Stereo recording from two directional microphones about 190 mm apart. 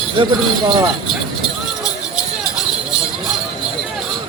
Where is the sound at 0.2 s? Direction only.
25° right (ahead or behind).